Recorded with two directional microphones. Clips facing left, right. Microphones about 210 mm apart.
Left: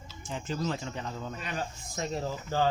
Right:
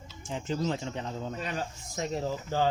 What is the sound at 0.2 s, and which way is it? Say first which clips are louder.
Speech: right 2 dB; 20° right (ahead or behind).